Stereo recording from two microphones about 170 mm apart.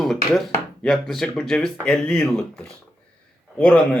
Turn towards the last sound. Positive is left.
turn(degrees=5)  # may be behind; listen again after turning